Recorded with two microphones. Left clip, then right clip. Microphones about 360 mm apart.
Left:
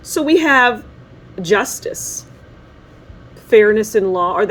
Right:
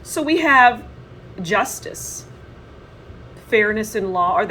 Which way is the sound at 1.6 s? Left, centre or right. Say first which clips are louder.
Left 3 dB; left.